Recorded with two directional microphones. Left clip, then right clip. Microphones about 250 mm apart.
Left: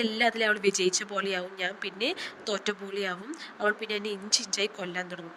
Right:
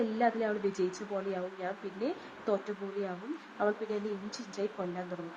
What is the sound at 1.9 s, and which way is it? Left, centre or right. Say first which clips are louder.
Speech: left 6 dB; left.